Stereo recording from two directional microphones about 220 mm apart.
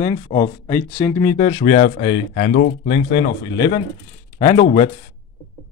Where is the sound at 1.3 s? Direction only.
30° left (ahead or behind).